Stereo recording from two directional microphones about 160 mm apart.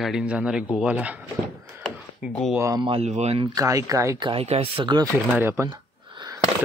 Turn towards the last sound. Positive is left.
turn(degrees=-25)  # may be behind; listen again after turning